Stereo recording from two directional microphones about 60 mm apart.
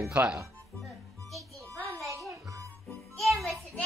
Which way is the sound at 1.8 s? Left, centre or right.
Right.